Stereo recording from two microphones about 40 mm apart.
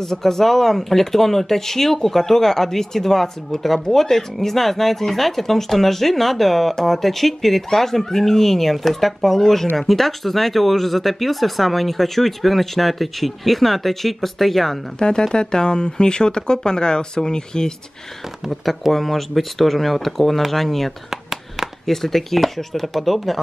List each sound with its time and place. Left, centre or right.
0.0 s speech: centre
15.0 s speech: centre
18.5 s speech: centre
21.1 s a sound: centre
21.8 s speech: centre